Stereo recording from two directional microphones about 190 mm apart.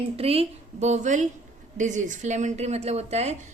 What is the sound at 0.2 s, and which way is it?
A woman's voice, 30° right (ahead or behind).